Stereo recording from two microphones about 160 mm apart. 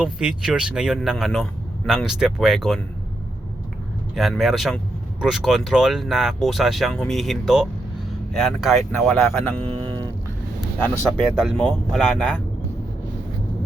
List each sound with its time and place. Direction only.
0.0 s speech: 5° right (ahead or behind)
4.1 s speech: centre (ahead or behind)
9.7 s vehicle: 30° right (ahead or behind)
10.8 s speech: 10° left (ahead or behind)
11.3 s speech: 5° right (ahead or behind)